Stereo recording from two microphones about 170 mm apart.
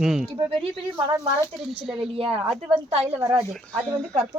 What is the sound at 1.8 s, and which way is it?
Speech, 5° right (ahead or behind).